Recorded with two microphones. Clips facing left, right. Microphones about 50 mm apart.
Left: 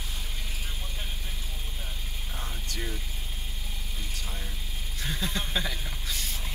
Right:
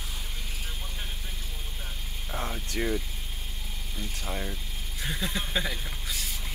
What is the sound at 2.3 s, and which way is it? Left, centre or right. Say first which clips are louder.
Vehicle: right 7 dB; right.